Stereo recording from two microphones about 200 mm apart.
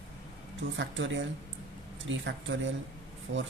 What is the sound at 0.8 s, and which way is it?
Speech, 65° right (ahead or behind).